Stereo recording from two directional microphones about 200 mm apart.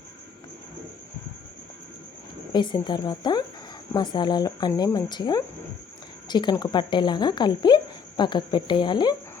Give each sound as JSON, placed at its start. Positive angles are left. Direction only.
{"t": 2.5, "sound": "speech", "side_deg": 20}